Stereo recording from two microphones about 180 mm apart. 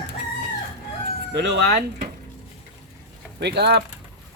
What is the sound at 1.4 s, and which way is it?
Speech, 75° right (ahead or behind).